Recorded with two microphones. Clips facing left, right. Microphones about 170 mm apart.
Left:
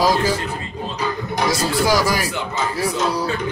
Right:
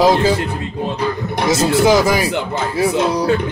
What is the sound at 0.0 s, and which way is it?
Speech, 25° right (ahead or behind).